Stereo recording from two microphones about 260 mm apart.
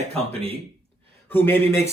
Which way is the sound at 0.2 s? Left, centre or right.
Right.